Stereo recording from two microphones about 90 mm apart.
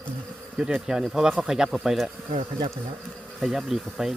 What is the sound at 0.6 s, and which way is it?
Speech, 5° right (ahead or behind).